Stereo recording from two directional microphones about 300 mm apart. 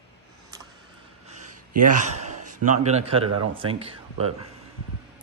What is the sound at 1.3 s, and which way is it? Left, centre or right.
Gasp, right.